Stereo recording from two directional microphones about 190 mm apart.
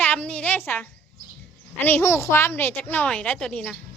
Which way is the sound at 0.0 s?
10° left (ahead or behind).